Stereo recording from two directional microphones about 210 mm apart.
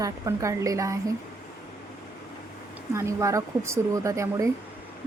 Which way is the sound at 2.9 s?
15° right (ahead or behind).